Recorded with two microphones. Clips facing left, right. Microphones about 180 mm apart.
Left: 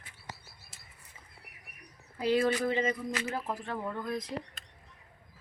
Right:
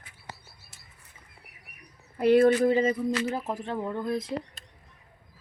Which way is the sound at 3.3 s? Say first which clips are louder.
Right 4 dB; 25° right (ahead or behind).